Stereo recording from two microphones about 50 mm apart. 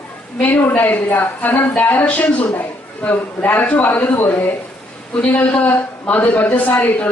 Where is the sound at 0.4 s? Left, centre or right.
Left.